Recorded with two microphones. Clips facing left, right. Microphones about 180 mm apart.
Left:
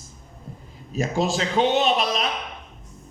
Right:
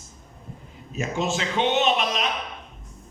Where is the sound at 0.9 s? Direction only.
35° left (ahead or behind).